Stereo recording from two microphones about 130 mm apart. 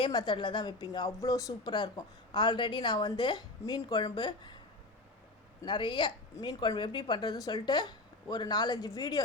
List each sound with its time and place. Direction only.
0.0 s a woman's voice: 35° left (ahead or behind)
5.6 s a woman's voice: 40° left (ahead or behind)